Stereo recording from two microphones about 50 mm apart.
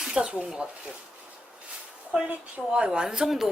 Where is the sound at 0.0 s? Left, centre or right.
Centre.